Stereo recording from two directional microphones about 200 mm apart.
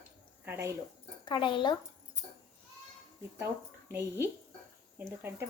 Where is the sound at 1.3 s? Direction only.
25° left (ahead or behind).